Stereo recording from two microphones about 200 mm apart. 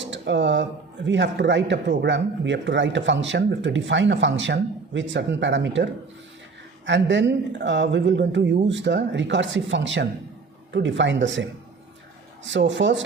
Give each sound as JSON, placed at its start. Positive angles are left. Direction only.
{"t": 0.0, "sound": "speech", "side_deg": -65}
{"t": 12.5, "sound": "speech", "side_deg": -65}